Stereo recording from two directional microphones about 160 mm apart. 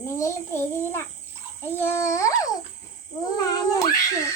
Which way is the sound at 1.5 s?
15° left (ahead or behind).